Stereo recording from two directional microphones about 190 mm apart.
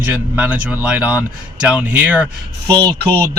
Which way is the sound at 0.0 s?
10° right (ahead or behind).